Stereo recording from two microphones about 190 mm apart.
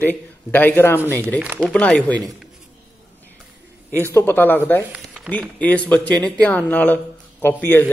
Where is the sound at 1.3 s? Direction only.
10° right (ahead or behind).